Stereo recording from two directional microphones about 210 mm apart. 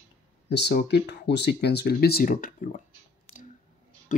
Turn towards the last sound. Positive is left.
turn(degrees=40)  # may be behind; listen again after turning